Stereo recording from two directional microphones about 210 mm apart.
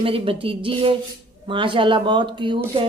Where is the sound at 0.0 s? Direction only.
25° right (ahead or behind).